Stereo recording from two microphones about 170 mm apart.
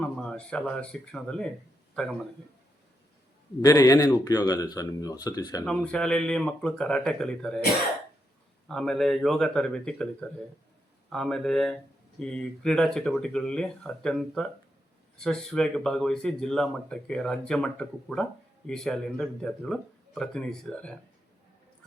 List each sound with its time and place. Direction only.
0.0 s speech: 5° left (ahead or behind)
3.6 s speech: 20° left (ahead or behind)
5.6 s speech: 5° left (ahead or behind)
8.6 s speech: 5° left (ahead or behind)